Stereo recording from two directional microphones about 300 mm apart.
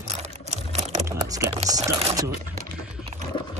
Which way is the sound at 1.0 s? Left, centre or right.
Centre.